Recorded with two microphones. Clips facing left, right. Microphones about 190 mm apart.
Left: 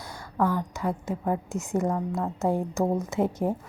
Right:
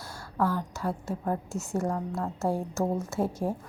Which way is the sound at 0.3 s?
15° left (ahead or behind).